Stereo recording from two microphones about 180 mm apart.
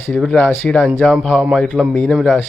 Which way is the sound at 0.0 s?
5° left (ahead or behind).